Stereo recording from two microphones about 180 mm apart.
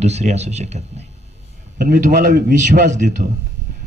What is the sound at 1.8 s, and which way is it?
Speech, 45° right (ahead or behind).